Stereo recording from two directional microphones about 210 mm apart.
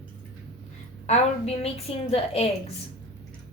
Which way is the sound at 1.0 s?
30° left (ahead or behind).